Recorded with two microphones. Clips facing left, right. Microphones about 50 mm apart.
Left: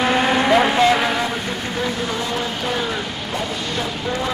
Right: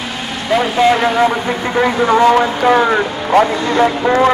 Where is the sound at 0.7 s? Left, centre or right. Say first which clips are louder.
Right 4 dB; centre.